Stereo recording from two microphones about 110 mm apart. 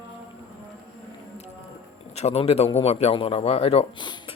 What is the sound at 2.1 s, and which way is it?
Speech, 70° left (ahead or behind).